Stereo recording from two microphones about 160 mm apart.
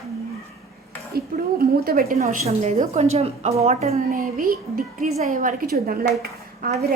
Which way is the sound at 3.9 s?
65° right (ahead or behind).